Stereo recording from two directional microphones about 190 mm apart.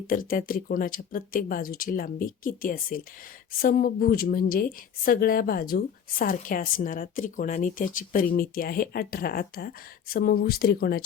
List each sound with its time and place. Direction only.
0.1 s a woman's voice: 45° left (ahead or behind)